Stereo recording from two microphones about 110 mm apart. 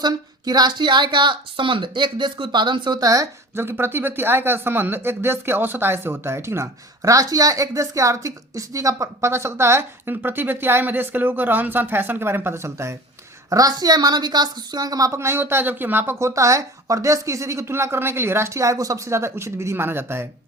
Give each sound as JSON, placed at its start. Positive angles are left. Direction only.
{"t": 0.0, "sound": "speech", "side_deg": -40}